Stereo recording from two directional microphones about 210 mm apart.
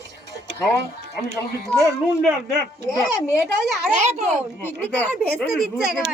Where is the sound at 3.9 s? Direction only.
35° right (ahead or behind).